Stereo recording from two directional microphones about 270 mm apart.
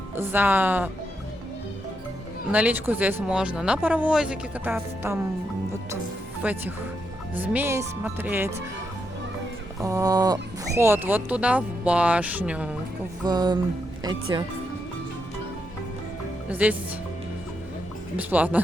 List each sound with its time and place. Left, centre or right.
0.2 s speech: centre
2.5 s speech: centre
6.4 s speech: centre
9.8 s speech: centre
13.2 s speech: centre
16.5 s speech: centre
18.2 s speech: centre